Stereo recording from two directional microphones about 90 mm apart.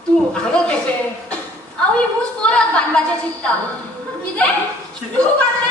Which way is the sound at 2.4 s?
10° left (ahead or behind).